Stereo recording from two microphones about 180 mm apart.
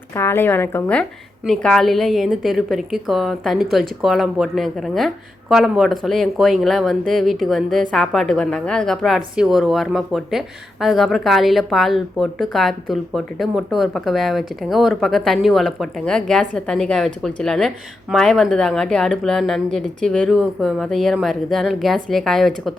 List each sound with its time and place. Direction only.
0.1 s a woman's voice: 15° left (ahead or behind)